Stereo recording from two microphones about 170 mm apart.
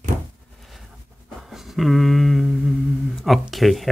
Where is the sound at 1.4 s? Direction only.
Centre (ahead or behind).